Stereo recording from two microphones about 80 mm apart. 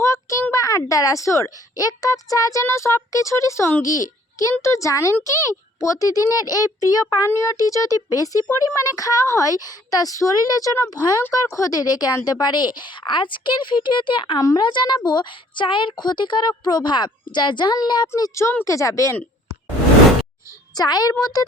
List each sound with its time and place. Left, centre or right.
0.0 s a sound: left
0.5 s a woman's voice: left
3.8 s a child's voice: left
7.3 s speech: left
11.2 s speech: left
14.3 s speech: left
14.6 s speech: left
18.6 s speech: left
20.7 s speech: left